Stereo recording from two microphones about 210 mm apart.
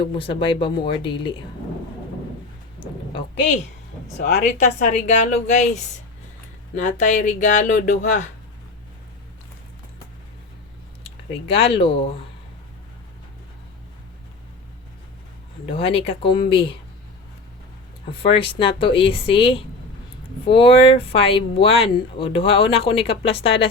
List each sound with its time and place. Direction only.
0.0 s speech: 25° left (ahead or behind)
2.8 s a woman's voice: 25° left (ahead or behind)
4.9 s speech: 35° left (ahead or behind)
11.0 s speech: 25° left (ahead or behind)
15.7 s speech: 25° left (ahead or behind)
18.1 s speech: 25° left (ahead or behind)